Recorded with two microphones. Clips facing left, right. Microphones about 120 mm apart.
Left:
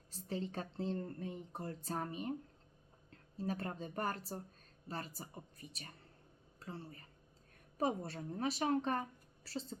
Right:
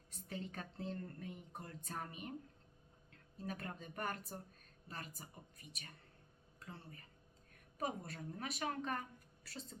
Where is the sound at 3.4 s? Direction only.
30° left (ahead or behind).